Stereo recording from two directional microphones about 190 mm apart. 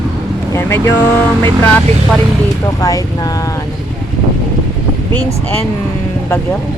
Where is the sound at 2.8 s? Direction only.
20° left (ahead or behind).